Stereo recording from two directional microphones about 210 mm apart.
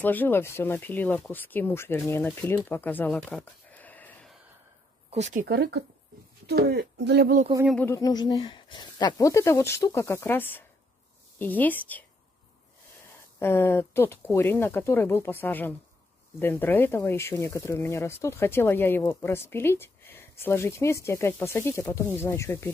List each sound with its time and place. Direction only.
0.0 s speech: 10° left (ahead or behind)
5.1 s speech: 35° right (ahead or behind)
7.7 s speech: 10° left (ahead or behind)
13.4 s speech: 10° left (ahead or behind)